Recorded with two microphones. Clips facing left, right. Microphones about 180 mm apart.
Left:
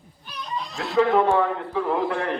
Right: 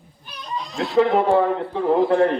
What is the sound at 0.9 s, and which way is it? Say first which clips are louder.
A man's voice: right 2 dB; 30° right (ahead or behind).